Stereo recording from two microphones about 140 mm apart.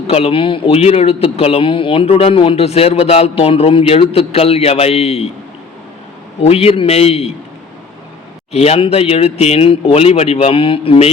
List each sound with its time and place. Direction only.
0.1 s a man's voice: 45° left (ahead or behind)
6.4 s a man's voice: 45° left (ahead or behind)
8.5 s a man's voice: 45° left (ahead or behind)